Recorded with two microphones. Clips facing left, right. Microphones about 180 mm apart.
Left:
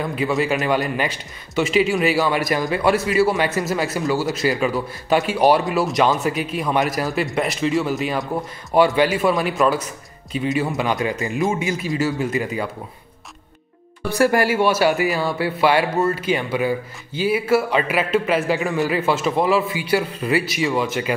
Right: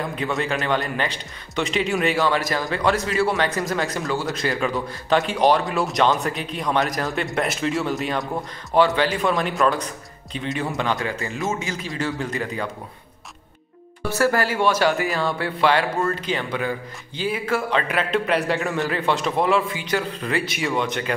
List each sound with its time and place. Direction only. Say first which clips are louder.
0.0 s a man's voice: left 4 dB; 5° left (ahead or behind)
8.7 s a man's voice: left 3 dB; 10° left (ahead or behind)
14.1 s a man's voice: left 4 dB; 15° left (ahead or behind)